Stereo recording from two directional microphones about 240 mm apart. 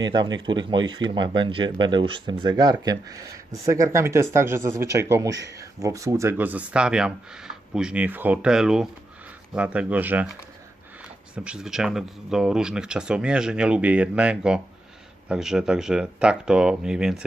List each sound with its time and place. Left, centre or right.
0.0 s speech: centre
11.3 s speech: centre